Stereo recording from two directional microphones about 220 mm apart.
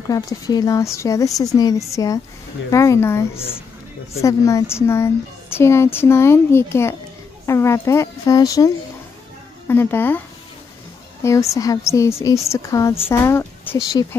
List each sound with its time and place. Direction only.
0.1 s a woman's voice: 15° left (ahead or behind)
11.2 s a woman's voice: 15° left (ahead or behind)